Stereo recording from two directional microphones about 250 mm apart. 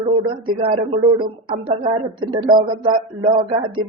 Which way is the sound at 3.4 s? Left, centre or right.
Centre.